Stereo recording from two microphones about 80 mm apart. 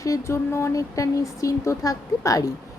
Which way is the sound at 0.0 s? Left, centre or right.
Left.